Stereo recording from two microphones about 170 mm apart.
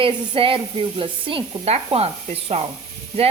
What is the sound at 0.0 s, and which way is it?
Speech, 30° right (ahead or behind).